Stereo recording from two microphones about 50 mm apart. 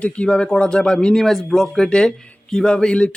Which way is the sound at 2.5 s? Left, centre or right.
Centre.